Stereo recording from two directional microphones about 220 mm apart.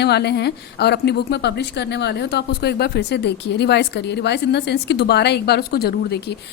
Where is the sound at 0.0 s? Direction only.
50° left (ahead or behind).